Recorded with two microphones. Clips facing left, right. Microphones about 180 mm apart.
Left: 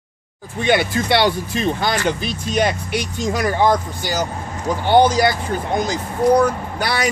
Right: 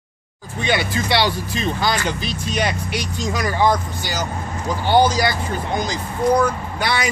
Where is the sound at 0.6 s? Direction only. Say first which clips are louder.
Left 4 dB; 55° left (ahead or behind).